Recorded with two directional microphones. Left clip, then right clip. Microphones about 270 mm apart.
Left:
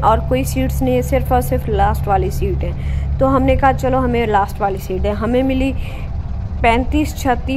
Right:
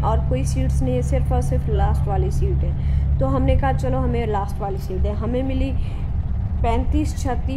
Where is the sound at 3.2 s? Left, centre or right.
Centre.